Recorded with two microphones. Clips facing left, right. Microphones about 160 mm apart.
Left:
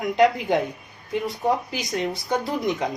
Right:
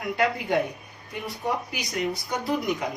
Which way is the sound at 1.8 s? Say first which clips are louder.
Left 2 dB; 25° left (ahead or behind).